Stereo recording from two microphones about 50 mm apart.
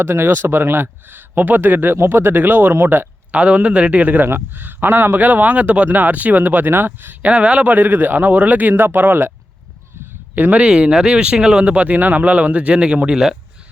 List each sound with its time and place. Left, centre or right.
0.0 s speech: right
2.0 s speech: right
3.3 s speech: right
4.0 s speech: right
7.2 s speech: right
10.3 s speech: right
10.7 s speech: right
11.6 s speech: right